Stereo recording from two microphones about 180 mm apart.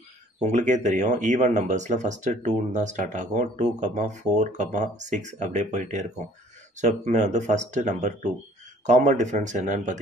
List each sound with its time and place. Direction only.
0.5 s speech: 40° right (ahead or behind)